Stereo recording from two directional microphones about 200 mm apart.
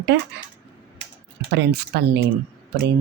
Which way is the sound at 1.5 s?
55° right (ahead or behind).